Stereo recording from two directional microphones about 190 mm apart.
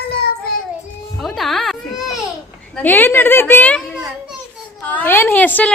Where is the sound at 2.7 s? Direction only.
10° left (ahead or behind).